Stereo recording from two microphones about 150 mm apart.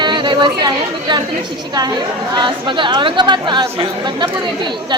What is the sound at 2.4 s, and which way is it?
Speech, 30° right (ahead or behind).